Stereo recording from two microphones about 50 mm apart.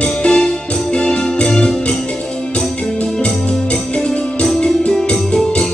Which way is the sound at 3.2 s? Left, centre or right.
Centre.